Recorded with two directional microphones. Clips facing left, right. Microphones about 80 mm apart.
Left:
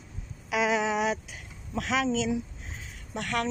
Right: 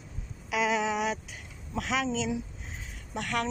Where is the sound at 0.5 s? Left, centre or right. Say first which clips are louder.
Left 2 dB; centre.